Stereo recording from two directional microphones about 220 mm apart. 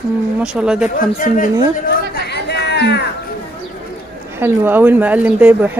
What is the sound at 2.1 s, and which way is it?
Chatter, 50° left (ahead or behind).